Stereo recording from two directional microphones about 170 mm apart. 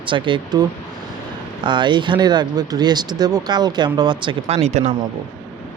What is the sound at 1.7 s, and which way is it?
Speech, 25° right (ahead or behind).